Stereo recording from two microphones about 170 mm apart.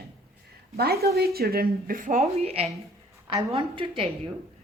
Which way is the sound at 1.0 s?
65° right (ahead or behind).